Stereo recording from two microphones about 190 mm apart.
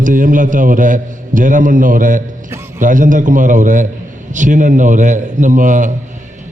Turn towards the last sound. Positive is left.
turn(degrees=-40)  # may be behind; listen again after turning